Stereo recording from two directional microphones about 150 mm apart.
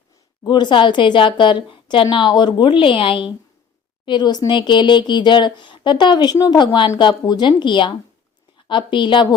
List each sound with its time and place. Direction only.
0.4 s a woman's voice: 30° left (ahead or behind)